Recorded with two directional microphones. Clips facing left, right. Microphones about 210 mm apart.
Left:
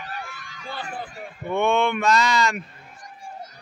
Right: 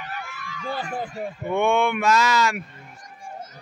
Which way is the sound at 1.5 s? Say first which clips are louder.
Even; 15° right (ahead or behind).